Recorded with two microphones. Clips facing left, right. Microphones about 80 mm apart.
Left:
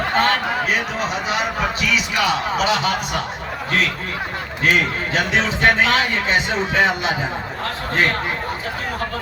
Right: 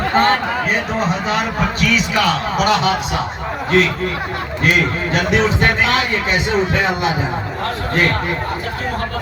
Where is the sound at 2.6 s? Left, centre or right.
Right.